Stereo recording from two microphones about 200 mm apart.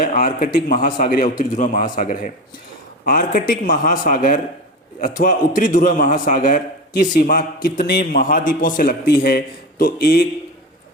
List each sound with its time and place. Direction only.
0.1 s a man's voice: 40° left (ahead or behind)